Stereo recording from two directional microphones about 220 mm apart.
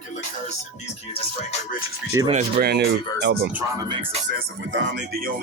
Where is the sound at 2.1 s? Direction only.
10° right (ahead or behind).